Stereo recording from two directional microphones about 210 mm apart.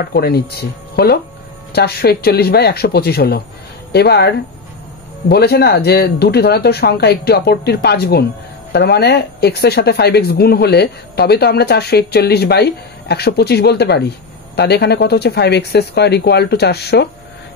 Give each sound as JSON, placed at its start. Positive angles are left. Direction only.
{"t": 0.1, "sound": "speech", "side_deg": 50}